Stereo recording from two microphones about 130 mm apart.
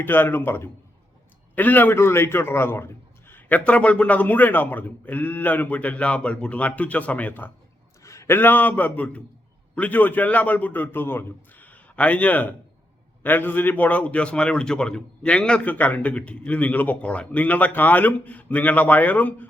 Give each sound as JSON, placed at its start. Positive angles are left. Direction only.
{"t": 0.0, "sound": "a man's voice", "side_deg": 15}